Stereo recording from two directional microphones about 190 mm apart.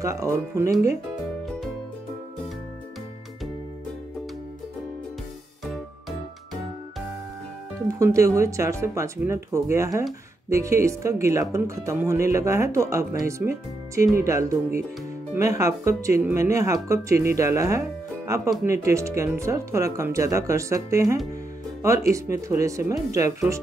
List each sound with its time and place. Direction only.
0.0 s speech: 15° right (ahead or behind)
5.7 s music: centre (ahead or behind)
7.9 s speech: 15° right (ahead or behind)
22.5 s speech: 15° right (ahead or behind)